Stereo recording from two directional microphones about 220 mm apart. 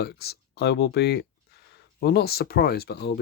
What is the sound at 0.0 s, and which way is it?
Speech, 45° left (ahead or behind).